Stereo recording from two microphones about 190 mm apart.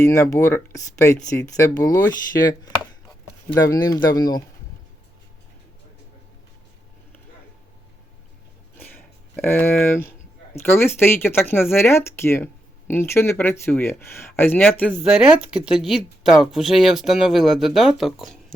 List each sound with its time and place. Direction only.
0.0 s speech: 15° left (ahead or behind)
3.6 s speech: 20° left (ahead or behind)
8.8 s speech: 10° left (ahead or behind)
15.0 s speech: 5° right (ahead or behind)